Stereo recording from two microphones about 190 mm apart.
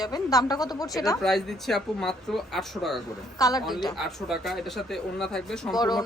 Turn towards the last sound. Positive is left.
turn(degrees=20)  # may be behind; listen again after turning